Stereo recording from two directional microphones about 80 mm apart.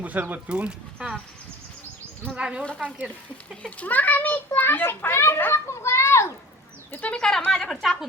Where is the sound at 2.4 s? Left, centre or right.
Centre.